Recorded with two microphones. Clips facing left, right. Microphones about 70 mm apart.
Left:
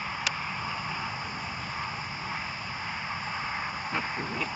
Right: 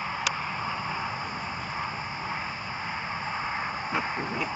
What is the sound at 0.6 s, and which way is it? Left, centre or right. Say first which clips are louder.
Vehicle: right 3 dB; centre.